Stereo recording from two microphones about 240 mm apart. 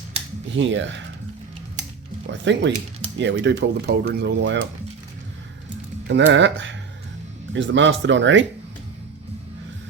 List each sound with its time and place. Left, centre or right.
0.5 s speech: right
2.2 s speech: right
6.1 s speech: right